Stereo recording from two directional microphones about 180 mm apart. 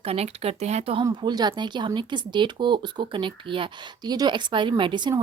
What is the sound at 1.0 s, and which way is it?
Speech, 25° right (ahead or behind).